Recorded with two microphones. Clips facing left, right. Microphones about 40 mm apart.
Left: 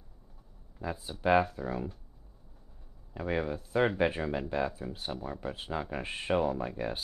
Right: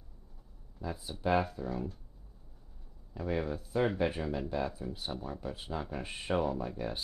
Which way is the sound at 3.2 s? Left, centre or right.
Left.